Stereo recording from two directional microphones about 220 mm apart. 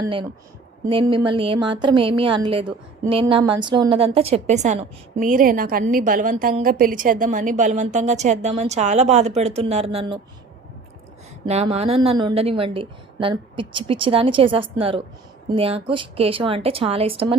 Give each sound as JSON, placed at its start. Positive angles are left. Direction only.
{"t": 0.0, "sound": "a woman's voice", "side_deg": -25}
{"t": 11.4, "sound": "a woman's voice", "side_deg": -30}